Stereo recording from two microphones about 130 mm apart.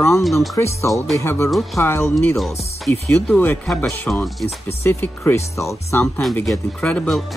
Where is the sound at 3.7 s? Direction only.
Centre (ahead or behind).